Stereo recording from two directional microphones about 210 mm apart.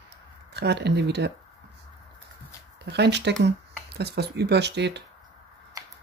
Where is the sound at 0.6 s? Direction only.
50° right (ahead or behind).